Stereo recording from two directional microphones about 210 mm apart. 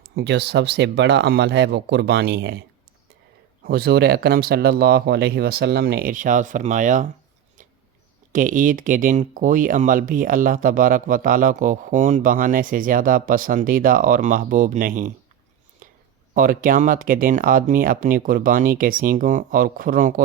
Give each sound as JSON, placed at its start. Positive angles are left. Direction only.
{"t": 0.2, "sound": "speech", "side_deg": -55}
{"t": 3.6, "sound": "speech", "side_deg": -45}
{"t": 8.3, "sound": "speech", "side_deg": -40}
{"t": 16.3, "sound": "speech", "side_deg": -40}